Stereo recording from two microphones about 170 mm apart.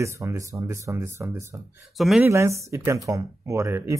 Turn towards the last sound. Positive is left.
turn(degrees=-15)  # may be behind; listen again after turning